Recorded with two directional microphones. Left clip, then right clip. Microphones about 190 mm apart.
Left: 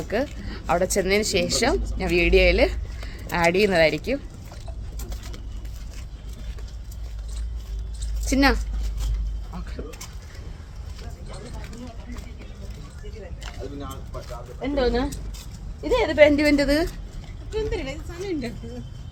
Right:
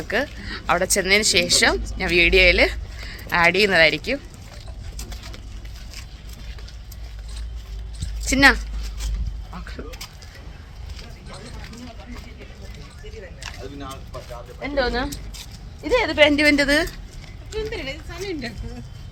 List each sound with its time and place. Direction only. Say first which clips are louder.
0.1 s speech: right 3 dB; centre (ahead or behind)
8.2 s speech: right 6 dB; centre (ahead or behind)
14.6 s speech: even; centre (ahead or behind)
15.1 s a sound: right 4 dB; 35° left (ahead or behind)
15.8 s speech: even; centre (ahead or behind)
17.5 s a woman's voice: even; 55° left (ahead or behind)